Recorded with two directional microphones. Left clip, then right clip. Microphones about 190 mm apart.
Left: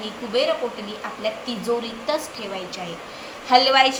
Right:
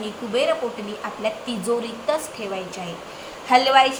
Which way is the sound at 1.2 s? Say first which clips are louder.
Even; 15° right (ahead or behind).